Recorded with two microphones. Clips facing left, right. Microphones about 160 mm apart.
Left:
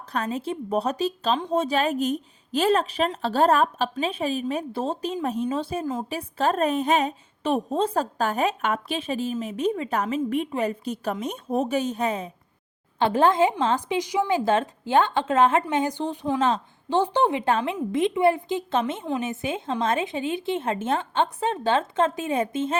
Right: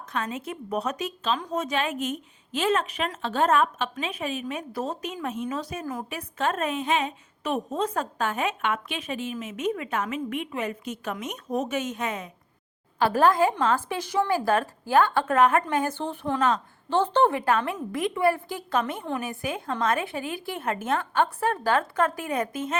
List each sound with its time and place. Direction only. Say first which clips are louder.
0.1 s a woman's voice: left 4 dB; 35° left (ahead or behind)